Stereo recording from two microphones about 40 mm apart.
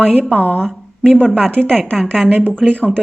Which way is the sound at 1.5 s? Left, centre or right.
Left.